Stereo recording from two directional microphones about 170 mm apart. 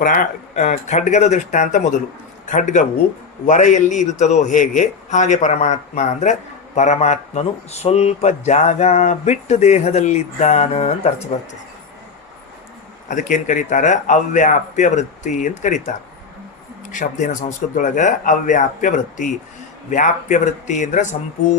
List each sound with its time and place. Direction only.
0.0 s a man's voice: 55° left (ahead or behind)
13.1 s a man's voice: 50° left (ahead or behind)
16.9 s a man's voice: 45° left (ahead or behind)